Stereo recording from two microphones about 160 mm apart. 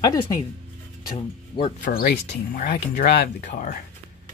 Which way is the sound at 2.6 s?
55° left (ahead or behind).